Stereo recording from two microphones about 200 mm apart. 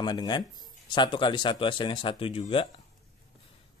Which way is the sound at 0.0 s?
20° left (ahead or behind).